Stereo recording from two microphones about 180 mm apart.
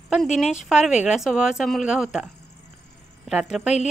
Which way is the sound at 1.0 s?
5° right (ahead or behind).